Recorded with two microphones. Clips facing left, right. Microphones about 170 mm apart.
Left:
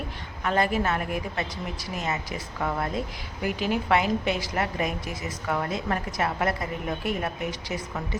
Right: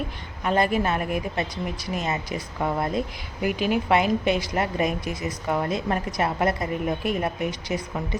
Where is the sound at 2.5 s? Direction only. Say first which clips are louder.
Right 3 dB; 20° right (ahead or behind).